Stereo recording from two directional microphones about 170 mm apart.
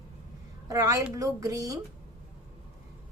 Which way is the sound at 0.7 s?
20° right (ahead or behind).